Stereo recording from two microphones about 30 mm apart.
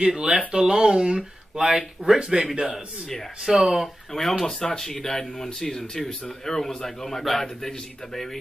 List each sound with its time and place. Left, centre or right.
0.0 s a man's voice: right
3.5 s speech: centre
4.1 s a man's voice: centre
4.6 s a man's voice: centre